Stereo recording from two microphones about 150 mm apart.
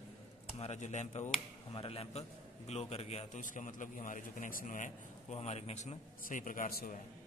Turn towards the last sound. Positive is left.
turn(degrees=65)  # may be behind; listen again after turning